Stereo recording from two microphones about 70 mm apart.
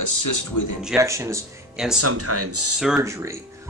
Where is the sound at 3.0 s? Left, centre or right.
Right.